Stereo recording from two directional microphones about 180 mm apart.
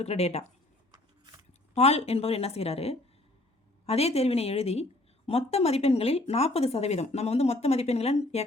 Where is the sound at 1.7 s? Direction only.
35° left (ahead or behind).